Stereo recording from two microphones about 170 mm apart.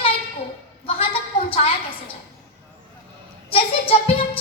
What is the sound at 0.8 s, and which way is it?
Speech, 35° left (ahead or behind).